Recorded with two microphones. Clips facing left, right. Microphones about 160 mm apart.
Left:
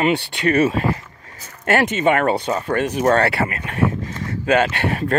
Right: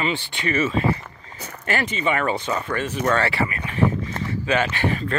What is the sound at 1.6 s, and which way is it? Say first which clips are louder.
Speech: left 7 dB; 70° left (ahead or behind).